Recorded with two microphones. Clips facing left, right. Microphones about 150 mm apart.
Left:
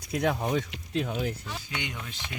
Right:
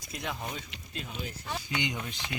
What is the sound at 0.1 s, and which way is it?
Speech, 60° left (ahead or behind).